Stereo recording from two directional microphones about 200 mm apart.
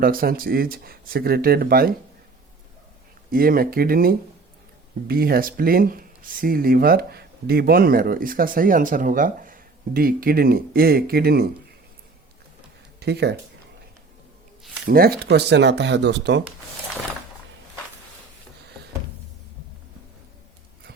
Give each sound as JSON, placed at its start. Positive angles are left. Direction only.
{"t": 0.0, "sound": "speech", "side_deg": -45}
{"t": 3.3, "sound": "speech", "side_deg": -45}
{"t": 13.0, "sound": "speech", "side_deg": -55}
{"t": 14.8, "sound": "speech", "side_deg": -50}